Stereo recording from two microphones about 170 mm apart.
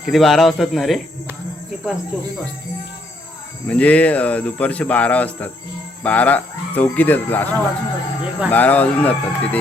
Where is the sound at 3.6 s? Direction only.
10° left (ahead or behind).